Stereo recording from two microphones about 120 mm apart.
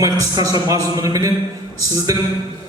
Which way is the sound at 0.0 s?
30° right (ahead or behind).